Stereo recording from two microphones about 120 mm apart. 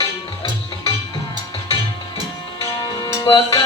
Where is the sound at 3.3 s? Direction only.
40° left (ahead or behind).